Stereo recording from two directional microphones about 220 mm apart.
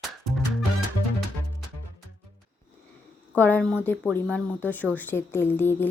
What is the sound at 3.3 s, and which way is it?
A woman's voice, 5° left (ahead or behind).